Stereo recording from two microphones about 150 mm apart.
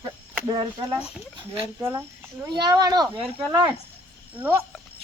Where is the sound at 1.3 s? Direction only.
35° right (ahead or behind).